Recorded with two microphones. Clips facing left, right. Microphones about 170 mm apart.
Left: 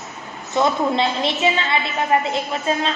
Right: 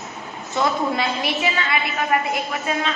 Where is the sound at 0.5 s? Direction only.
25° left (ahead or behind).